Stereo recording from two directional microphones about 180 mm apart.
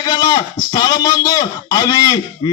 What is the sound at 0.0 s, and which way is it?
Speech, 20° left (ahead or behind).